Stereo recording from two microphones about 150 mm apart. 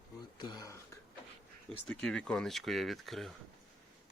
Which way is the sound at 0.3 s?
30° left (ahead or behind).